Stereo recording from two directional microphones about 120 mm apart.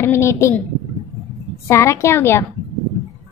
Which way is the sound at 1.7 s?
25° left (ahead or behind).